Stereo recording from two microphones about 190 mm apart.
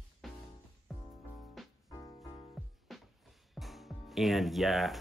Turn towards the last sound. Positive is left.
turn(degrees=0)  # may be behind; listen again after turning